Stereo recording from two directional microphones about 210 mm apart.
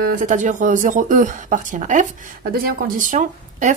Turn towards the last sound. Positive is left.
turn(degrees=-35)  # may be behind; listen again after turning